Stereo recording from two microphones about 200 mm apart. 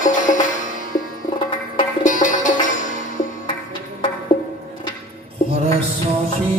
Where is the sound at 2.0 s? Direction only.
40° left (ahead or behind).